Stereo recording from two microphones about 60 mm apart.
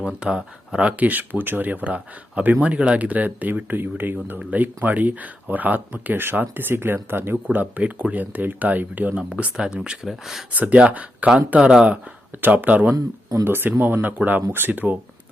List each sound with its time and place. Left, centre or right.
0.2 s speech: centre; by 7.3 s right
7.5 s speech: right
10.1 s speech: centre
10.5 s speech: right
12.4 s speech: right